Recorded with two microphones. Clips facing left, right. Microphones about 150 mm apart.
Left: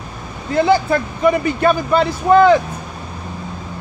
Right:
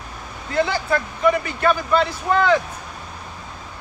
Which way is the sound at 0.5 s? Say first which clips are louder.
Left 6 dB; 15° left (ahead or behind).